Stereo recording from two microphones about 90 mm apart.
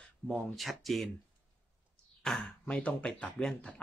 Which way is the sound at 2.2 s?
10° left (ahead or behind).